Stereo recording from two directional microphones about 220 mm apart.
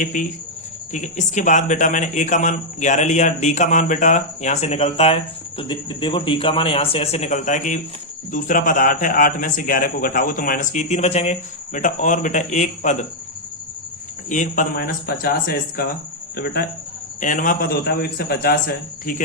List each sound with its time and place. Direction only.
0.0 s a man's voice: 35° left (ahead or behind)
14.3 s a man's voice: 35° left (ahead or behind)